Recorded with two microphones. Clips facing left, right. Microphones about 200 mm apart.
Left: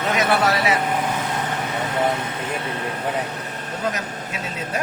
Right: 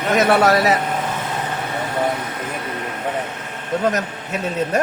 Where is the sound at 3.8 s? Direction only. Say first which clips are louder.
Right 4 dB; 45° right (ahead or behind).